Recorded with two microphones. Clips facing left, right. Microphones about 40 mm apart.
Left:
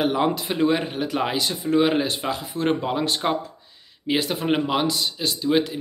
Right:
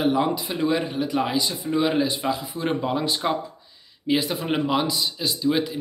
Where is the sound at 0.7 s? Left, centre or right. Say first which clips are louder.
Right 2 dB; left.